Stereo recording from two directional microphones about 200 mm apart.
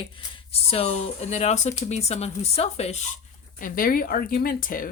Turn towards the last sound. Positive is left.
turn(degrees=45)  # may be behind; listen again after turning